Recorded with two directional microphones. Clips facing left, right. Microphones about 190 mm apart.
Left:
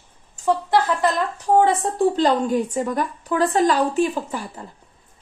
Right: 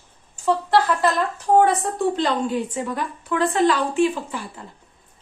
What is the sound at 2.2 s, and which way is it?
A woman's voice, 40° left (ahead or behind).